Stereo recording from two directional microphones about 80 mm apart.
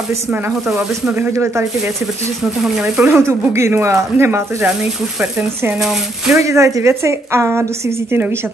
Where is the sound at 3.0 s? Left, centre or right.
Right.